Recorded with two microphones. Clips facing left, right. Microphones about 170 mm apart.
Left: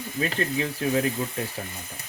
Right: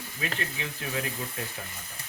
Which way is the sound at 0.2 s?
40° left (ahead or behind).